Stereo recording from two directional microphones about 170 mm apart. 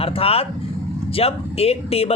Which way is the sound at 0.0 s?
35° left (ahead or behind).